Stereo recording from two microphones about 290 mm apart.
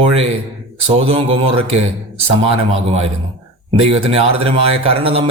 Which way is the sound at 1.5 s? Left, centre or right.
Right.